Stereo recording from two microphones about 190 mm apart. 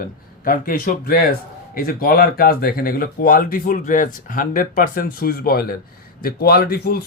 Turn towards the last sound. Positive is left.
turn(degrees=55)  # may be behind; listen again after turning